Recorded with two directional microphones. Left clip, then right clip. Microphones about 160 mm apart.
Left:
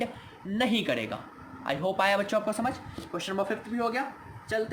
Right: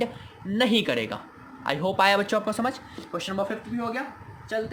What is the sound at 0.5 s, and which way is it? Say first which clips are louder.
A woman's voice: right 4 dB; 35° right (ahead or behind).